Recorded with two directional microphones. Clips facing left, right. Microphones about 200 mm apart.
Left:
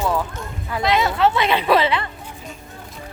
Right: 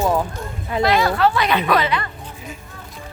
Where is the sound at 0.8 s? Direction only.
20° left (ahead or behind).